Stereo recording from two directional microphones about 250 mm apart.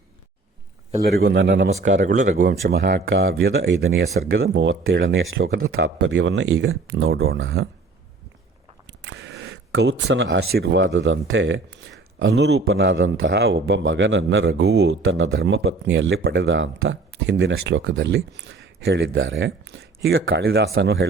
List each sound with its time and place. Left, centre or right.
1.0 s speech: right
1.6 s speech: right
8.9 s speech: right